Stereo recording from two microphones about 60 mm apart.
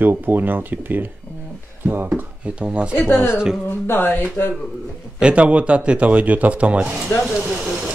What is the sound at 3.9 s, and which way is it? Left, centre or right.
Speech, left.